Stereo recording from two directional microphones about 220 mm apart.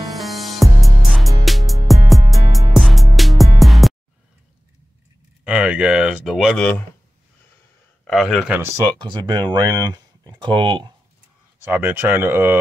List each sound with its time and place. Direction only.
0.1 s music: centre (ahead or behind)
5.4 s speech: 5° right (ahead or behind)
8.1 s speech: centre (ahead or behind)
9.0 s speech: 20° right (ahead or behind)
11.6 s speech: 10° right (ahead or behind)